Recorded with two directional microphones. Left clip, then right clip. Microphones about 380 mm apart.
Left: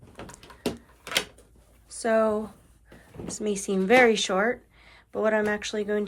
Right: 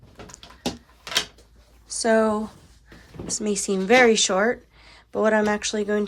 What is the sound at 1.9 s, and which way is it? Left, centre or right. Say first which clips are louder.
Speech: right 3 dB; centre.